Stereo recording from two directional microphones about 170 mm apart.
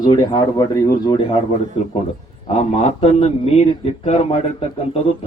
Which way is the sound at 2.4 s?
35° left (ahead or behind).